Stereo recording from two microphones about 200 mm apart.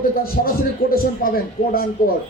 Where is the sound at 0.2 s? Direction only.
45° left (ahead or behind).